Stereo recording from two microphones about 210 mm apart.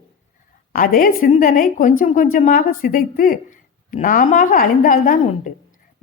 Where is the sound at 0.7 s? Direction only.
40° left (ahead or behind).